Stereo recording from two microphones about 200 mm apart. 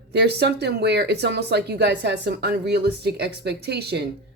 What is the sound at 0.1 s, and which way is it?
A woman's voice, 55° right (ahead or behind).